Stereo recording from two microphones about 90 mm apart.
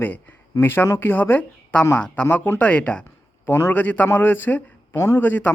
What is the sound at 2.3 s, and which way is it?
A man's voice, 20° left (ahead or behind).